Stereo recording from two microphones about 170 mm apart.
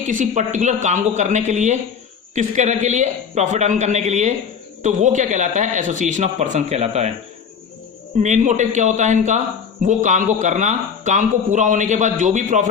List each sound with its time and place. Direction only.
0.1 s a man's voice: 45° right (ahead or behind)
8.2 s a man's voice: 45° right (ahead or behind)